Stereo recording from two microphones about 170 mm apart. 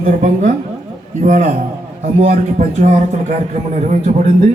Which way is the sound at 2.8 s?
45° right (ahead or behind).